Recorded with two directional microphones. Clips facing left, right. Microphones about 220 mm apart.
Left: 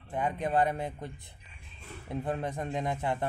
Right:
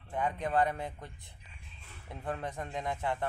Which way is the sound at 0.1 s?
20° left (ahead or behind).